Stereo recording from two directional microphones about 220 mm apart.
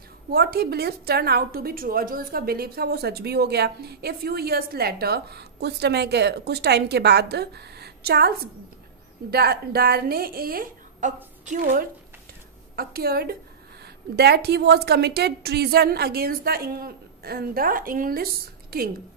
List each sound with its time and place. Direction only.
0.3 s a woman's voice: 45° right (ahead or behind)